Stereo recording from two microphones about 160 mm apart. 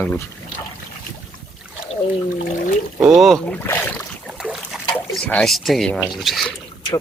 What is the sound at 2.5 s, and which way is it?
Trickle, 55° left (ahead or behind).